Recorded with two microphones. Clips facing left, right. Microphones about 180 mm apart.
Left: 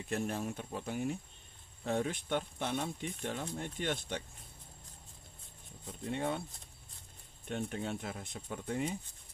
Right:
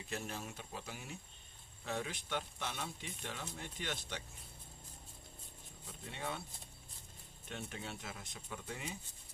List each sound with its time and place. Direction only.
0.1 s speech: 55° left (ahead or behind)
5.9 s speech: 50° left (ahead or behind)
7.4 s speech: 50° left (ahead or behind)